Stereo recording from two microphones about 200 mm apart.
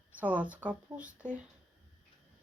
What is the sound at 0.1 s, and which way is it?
Speech, 5° right (ahead or behind).